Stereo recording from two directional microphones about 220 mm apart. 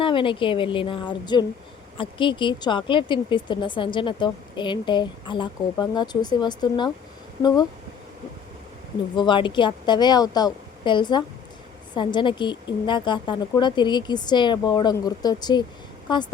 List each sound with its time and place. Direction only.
0.0 s speech: 20° left (ahead or behind)
9.1 s speech: 20° left (ahead or behind)